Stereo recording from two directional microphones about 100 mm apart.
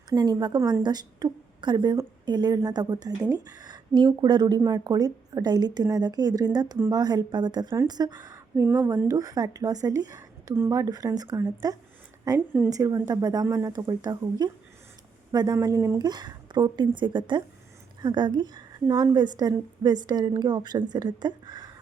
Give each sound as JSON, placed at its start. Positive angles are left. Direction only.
{"t": 0.1, "sound": "a woman's voice", "side_deg": -45}
{"t": 8.5, "sound": "speech", "side_deg": -20}
{"t": 9.0, "sound": "a woman's voice", "side_deg": -35}
{"t": 15.5, "sound": "a woman's voice", "side_deg": -30}
{"t": 16.0, "sound": "a woman's voice", "side_deg": -45}